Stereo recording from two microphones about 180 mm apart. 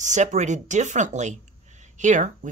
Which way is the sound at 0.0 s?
40° right (ahead or behind).